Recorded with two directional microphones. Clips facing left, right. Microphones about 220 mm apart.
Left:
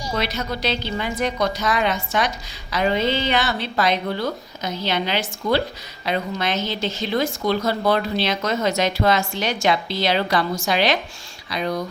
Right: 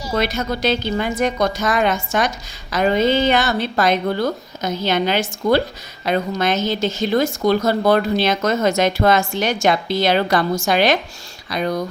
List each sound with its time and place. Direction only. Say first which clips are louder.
0.2 s a woman's voice: right 6 dB; 50° right (ahead or behind)